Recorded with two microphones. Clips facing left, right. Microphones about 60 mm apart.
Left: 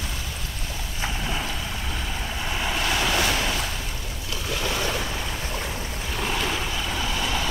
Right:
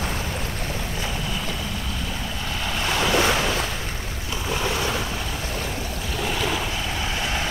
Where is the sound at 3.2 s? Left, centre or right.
Right.